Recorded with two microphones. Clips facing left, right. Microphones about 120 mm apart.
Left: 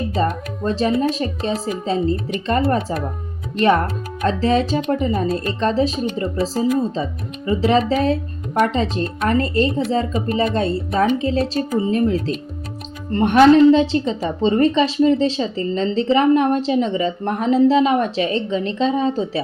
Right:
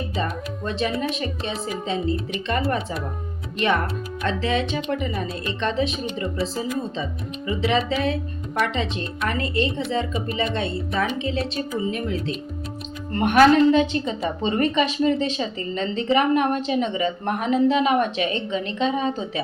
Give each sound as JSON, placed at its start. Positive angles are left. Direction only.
{"t": 0.1, "sound": "speech", "side_deg": 35}
{"t": 4.2, "sound": "speech", "side_deg": 40}
{"t": 13.1, "sound": "a woman's voice", "side_deg": 25}